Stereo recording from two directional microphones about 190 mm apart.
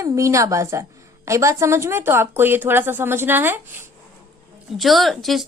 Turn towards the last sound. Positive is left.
turn(degrees=0)  # may be behind; listen again after turning